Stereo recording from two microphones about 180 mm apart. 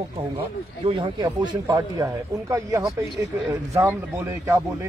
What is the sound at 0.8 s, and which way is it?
A man's voice, 30° right (ahead or behind).